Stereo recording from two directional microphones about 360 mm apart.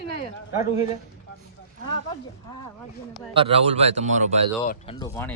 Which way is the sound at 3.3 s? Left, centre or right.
Centre.